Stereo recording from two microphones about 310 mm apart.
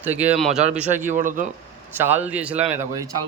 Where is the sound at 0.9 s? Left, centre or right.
Right.